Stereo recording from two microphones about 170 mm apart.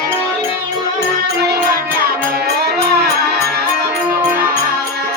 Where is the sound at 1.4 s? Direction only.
70° right (ahead or behind).